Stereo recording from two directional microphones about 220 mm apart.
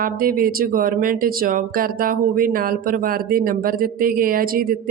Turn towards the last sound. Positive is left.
turn(degrees=-40)  # may be behind; listen again after turning